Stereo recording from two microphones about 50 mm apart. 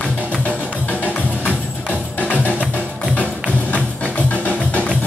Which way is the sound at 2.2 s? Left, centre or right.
Left.